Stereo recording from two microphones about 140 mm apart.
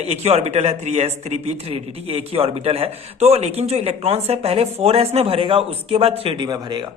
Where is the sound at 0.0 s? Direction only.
50° right (ahead or behind).